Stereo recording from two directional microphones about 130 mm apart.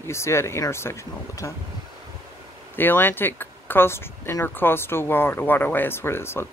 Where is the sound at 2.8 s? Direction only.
15° left (ahead or behind).